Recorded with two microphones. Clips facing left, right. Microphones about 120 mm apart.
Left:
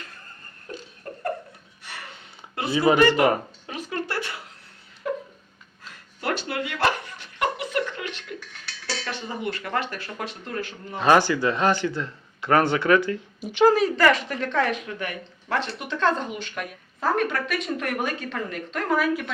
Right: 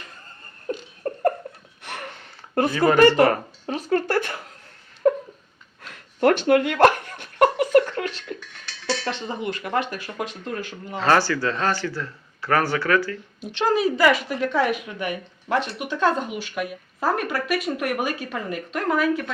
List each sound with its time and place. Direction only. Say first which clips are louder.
0.7 s a sound: right 9 dB; 45° right (ahead or behind)
1.8 s a sound: right 6 dB; 55° right (ahead or behind)
2.7 s a woman's voice: left 1 dB; 15° left (ahead or behind)
3.7 s a sound: right 8 dB; 40° right (ahead or behind)
5.8 s dog: right 11 dB; 55° right (ahead or behind)
9.0 s speech: right 3 dB; 25° right (ahead or behind)
10.9 s speech: left 1 dB; 15° left (ahead or behind)
13.4 s a woman's voice: left 5 dB; 10° left (ahead or behind)
13.7 s speech: right 1 dB; 5° right (ahead or behind)